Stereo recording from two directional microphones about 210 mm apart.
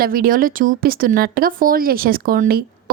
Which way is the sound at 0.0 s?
45° right (ahead or behind).